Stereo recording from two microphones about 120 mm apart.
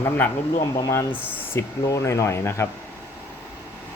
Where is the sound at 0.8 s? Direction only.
30° left (ahead or behind).